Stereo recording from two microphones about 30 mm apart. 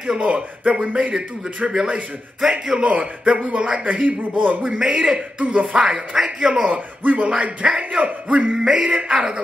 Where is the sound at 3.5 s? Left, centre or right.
Right.